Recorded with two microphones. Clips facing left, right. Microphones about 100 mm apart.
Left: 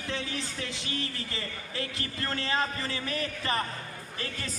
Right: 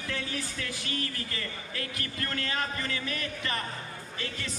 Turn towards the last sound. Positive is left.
turn(degrees=35)  # may be behind; listen again after turning